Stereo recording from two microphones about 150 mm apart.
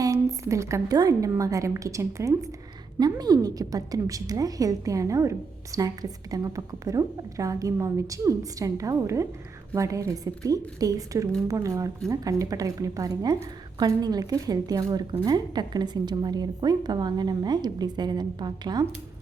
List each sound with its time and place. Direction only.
0.0 s a woman's voice: 20° right (ahead or behind)